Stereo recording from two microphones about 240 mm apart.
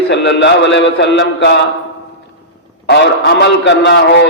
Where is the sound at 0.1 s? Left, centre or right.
Left.